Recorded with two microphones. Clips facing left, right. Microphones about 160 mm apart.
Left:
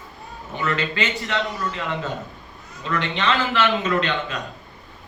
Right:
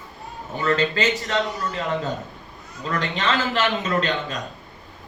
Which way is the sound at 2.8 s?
40° right (ahead or behind).